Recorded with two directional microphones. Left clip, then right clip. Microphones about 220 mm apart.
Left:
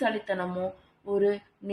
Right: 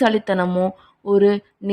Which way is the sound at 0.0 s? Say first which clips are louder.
Right 10 dB; 45° right (ahead or behind).